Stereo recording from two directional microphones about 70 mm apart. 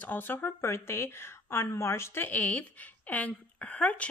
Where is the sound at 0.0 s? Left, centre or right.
Left.